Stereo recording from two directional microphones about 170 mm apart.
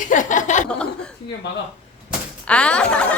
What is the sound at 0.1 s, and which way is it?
Chuckle, 50° left (ahead or behind).